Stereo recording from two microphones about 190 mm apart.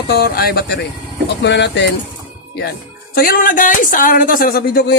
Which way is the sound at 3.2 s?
50° left (ahead or behind).